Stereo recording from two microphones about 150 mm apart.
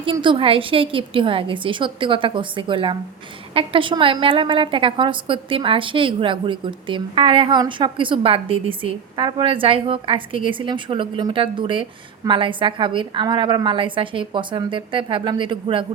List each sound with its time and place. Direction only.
0.0 s a woman's voice: 35° right (ahead or behind)